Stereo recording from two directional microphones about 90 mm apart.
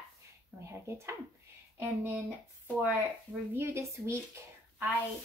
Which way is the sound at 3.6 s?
30° right (ahead or behind).